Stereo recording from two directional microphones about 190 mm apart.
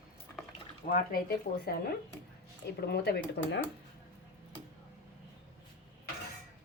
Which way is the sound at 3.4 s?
70° left (ahead or behind).